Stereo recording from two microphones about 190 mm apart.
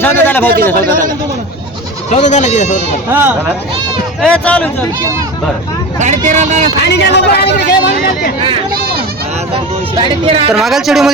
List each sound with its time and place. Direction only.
0.0 s speech: 10° left (ahead or behind)
2.0 s speech: 40° left (ahead or behind)
3.1 s speech: 10° right (ahead or behind)
4.2 s speech: 5° left (ahead or behind)
6.0 s speech: 40° right (ahead or behind)
6.8 s a man's voice: 65° left (ahead or behind)
8.7 s speech: 55° right (ahead or behind)
10.0 s speech: 30° right (ahead or behind)
10.5 s speech: centre (ahead or behind)